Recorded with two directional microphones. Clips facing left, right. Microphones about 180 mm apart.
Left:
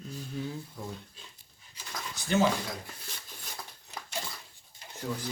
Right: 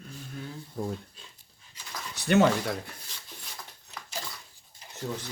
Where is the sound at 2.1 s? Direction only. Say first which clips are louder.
Right 5 dB; 65° right (ahead or behind).